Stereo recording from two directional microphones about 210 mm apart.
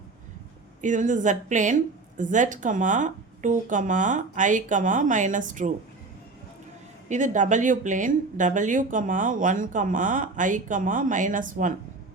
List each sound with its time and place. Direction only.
0.8 s a woman's voice: 35° right (ahead or behind)
7.1 s a woman's voice: 35° right (ahead or behind)